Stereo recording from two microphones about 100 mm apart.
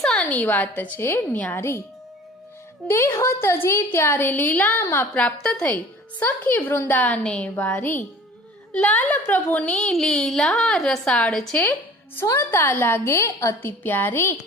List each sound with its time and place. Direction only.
0.0 s a sound: 5° left (ahead or behind)
0.3 s a woman's voice: 15° left (ahead or behind)
2.8 s a woman's voice: 25° left (ahead or behind)
5.1 s a woman's voice: 10° left (ahead or behind)
11.6 s a sound: 20° left (ahead or behind)
12.2 s a woman's voice: 30° left (ahead or behind)